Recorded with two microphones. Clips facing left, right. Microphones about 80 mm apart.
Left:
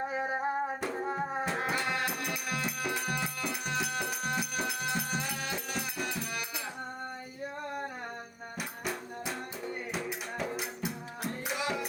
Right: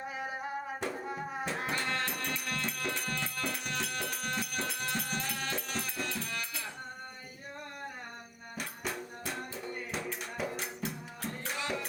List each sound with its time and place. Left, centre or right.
0.1 s music: left
1.5 s music: centre
8.5 s music: centre
11.2 s music: centre